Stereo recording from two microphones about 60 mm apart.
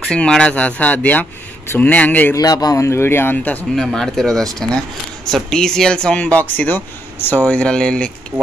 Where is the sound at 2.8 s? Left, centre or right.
Left.